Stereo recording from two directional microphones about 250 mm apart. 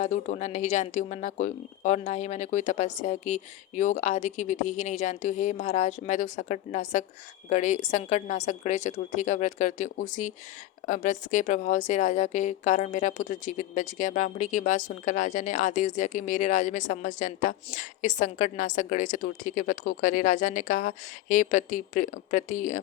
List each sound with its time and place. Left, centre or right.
0.0 s speech: left